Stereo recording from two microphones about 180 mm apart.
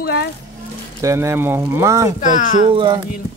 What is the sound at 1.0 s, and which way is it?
Speech, 15° right (ahead or behind).